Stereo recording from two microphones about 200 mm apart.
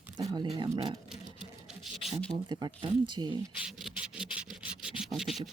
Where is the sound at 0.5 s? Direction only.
20° right (ahead or behind).